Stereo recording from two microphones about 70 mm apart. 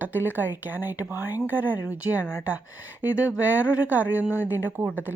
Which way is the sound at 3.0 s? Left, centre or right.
Right.